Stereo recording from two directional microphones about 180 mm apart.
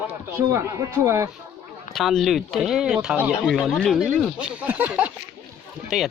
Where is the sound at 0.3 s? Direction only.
15° right (ahead or behind).